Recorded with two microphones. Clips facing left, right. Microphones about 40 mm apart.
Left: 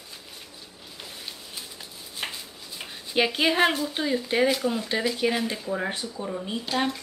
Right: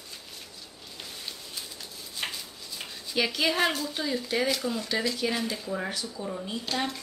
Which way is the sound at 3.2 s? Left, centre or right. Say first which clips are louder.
Left 4 dB; left.